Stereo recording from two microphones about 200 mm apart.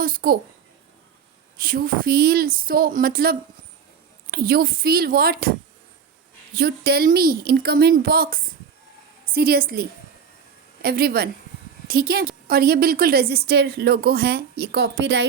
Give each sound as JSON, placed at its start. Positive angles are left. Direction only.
{"t": 0.0, "sound": "speech", "side_deg": -45}
{"t": 1.6, "sound": "speech", "side_deg": -45}
{"t": 10.8, "sound": "speech", "side_deg": -50}